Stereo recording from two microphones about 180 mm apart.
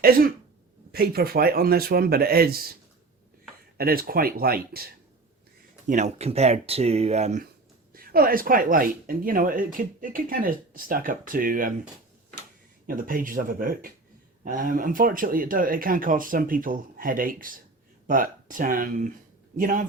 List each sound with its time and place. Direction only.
0.0 s speech: 55° right (ahead or behind)
3.8 s speech: 55° right (ahead or behind)
5.9 s speech: 40° right (ahead or behind)
7.9 s speech: 55° right (ahead or behind)
12.9 s speech: 50° right (ahead or behind)